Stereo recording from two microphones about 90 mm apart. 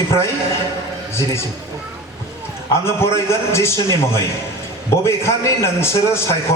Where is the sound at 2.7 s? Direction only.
30° left (ahead or behind).